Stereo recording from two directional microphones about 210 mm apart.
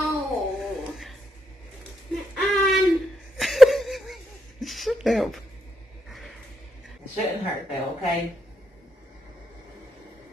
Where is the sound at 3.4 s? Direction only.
Centre (ahead or behind).